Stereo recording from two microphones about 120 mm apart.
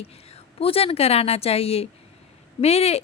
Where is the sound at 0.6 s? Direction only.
55° left (ahead or behind).